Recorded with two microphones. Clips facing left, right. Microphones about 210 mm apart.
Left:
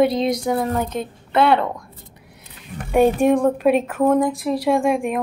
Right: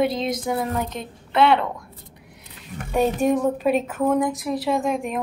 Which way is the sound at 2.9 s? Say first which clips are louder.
Left 5 dB; 55° left (ahead or behind).